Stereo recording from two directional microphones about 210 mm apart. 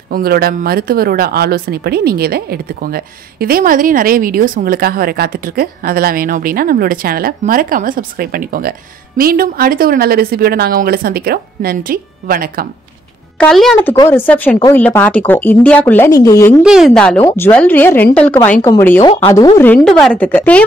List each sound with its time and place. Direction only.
0.1 s a woman's voice: 45° right (ahead or behind)
13.4 s a woman's voice: centre (ahead or behind)
16.6 s speech: centre (ahead or behind)
17.2 s a woman's voice: 20° left (ahead or behind)
17.5 s a woman's voice: 5° left (ahead or behind)